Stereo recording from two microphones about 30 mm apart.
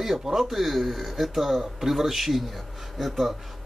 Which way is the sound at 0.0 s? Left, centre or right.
Centre.